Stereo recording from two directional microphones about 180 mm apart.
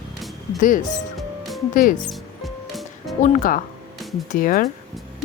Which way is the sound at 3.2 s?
50° left (ahead or behind).